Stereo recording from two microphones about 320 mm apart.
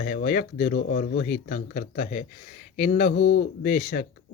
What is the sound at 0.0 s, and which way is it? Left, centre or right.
Speech, left.